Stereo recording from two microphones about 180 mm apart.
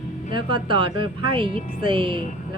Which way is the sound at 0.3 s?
25° right (ahead or behind).